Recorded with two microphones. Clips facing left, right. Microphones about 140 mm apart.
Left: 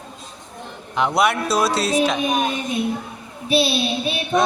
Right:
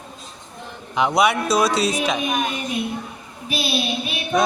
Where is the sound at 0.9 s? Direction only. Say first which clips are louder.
Right 1 dB; centre (ahead or behind).